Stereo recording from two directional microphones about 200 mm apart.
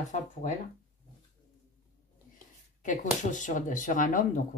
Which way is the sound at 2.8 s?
40° left (ahead or behind).